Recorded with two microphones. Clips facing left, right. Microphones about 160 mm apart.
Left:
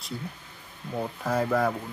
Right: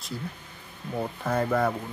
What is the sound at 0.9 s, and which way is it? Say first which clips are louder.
Speech: even; centre (ahead or behind).